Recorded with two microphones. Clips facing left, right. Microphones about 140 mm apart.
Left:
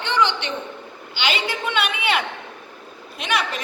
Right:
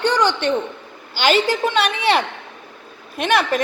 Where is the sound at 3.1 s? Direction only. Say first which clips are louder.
Right 7 dB; 50° right (ahead or behind).